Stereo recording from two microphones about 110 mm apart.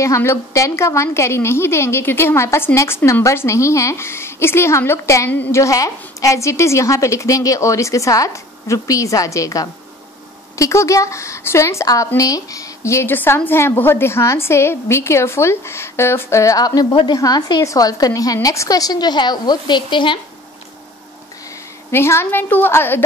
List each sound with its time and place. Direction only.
0.0 s a woman's voice: 25° left (ahead or behind)
16.9 s a woman's voice: 45° left (ahead or behind)
21.9 s a woman's voice: 20° left (ahead or behind)